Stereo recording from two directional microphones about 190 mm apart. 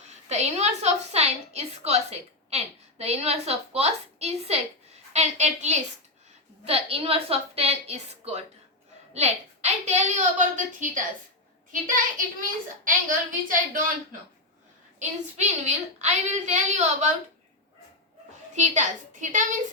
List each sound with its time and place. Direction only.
0.0 s a woman's voice: 35° right (ahead or behind)
18.5 s a woman's voice: 40° right (ahead or behind)